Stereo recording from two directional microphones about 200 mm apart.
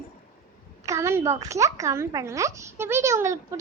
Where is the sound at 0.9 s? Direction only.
15° right (ahead or behind).